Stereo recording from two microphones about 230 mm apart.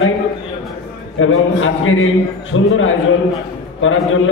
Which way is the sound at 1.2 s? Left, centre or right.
Left.